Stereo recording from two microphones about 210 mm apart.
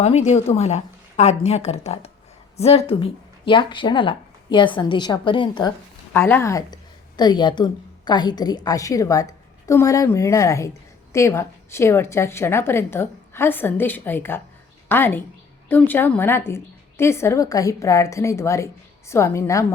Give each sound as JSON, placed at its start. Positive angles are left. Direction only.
{"t": 0.0, "sound": "a woman's voice", "side_deg": 30}
{"t": 6.1, "sound": "a woman's voice", "side_deg": 10}